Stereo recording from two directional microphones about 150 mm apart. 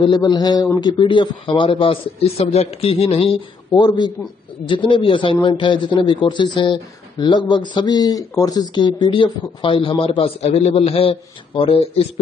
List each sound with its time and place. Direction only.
0.0 s a man's voice: 30° left (ahead or behind)